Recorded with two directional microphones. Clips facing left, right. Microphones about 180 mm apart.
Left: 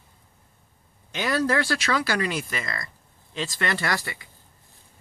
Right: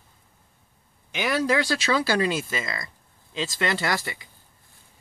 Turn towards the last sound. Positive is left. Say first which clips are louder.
# right 1 dB
turn(degrees=-20)  # may be behind; listen again after turning